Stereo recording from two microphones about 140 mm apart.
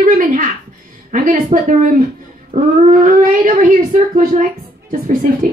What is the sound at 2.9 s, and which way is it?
Speech, 70° right (ahead or behind).